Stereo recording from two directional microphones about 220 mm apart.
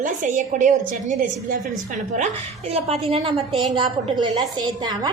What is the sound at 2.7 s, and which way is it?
A woman's voice, 25° right (ahead or behind).